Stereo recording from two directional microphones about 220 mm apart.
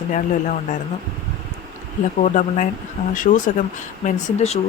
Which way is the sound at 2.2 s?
35° left (ahead or behind).